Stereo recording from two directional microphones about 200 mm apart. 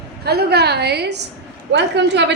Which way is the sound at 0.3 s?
55° right (ahead or behind).